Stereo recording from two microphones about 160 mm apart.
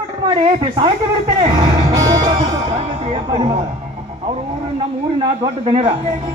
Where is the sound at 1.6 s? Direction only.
30° right (ahead or behind).